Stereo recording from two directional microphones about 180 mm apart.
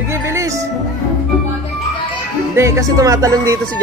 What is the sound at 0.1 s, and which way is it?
Music, 15° right (ahead or behind).